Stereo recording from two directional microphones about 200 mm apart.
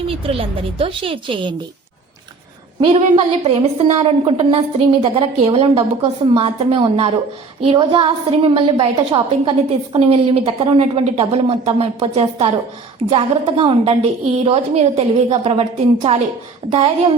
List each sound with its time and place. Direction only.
0.1 s a woman's voice: 25° right (ahead or behind)
2.8 s a woman's voice: 25° right (ahead or behind)